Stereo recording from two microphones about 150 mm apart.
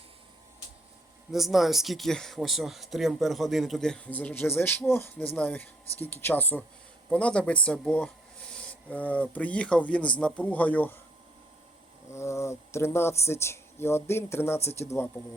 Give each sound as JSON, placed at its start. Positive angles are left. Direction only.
{"t": 1.3, "sound": "speech", "side_deg": 0}
{"t": 12.1, "sound": "speech", "side_deg": 20}